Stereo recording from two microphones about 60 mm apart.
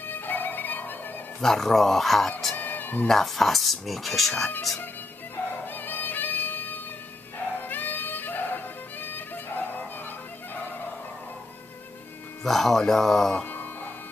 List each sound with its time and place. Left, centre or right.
0.0 s music: left
1.4 s speech: centre
2.5 s music: left
3.1 s speech: centre
5.7 s music: left
12.4 s speech: centre